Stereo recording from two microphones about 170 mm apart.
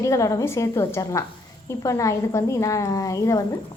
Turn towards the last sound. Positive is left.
turn(degrees=20)  # may be behind; listen again after turning